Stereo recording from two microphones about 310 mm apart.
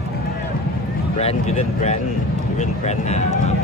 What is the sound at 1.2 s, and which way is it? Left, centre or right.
Speech, centre.